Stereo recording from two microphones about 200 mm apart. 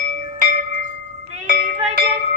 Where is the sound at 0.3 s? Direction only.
40° right (ahead or behind).